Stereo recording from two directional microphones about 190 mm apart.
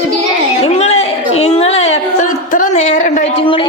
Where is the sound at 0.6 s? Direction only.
35° left (ahead or behind).